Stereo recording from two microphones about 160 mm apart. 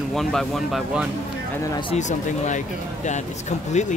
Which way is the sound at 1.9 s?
50° left (ahead or behind).